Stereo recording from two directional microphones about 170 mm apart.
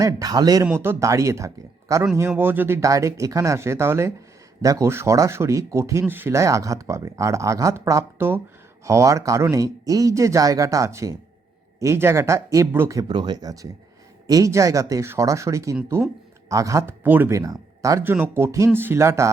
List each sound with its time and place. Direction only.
0.0 s speech: 20° right (ahead or behind)